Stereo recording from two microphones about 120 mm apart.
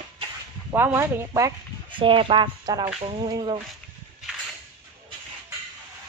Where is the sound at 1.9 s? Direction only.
45° right (ahead or behind).